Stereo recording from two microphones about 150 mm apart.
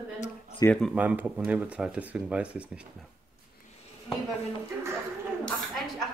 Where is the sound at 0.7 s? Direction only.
5° left (ahead or behind).